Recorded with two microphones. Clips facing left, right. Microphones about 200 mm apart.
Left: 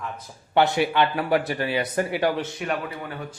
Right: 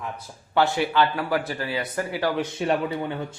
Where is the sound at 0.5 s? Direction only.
20° left (ahead or behind).